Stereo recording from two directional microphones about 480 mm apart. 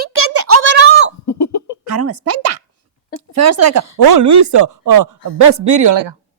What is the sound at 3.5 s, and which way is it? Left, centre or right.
A woman's voice, right.